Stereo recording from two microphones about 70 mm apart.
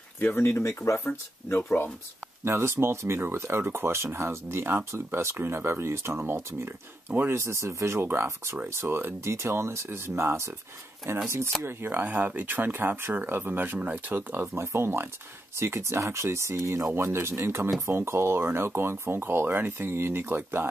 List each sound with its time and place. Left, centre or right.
0.2 s speech: left
2.4 s speech: right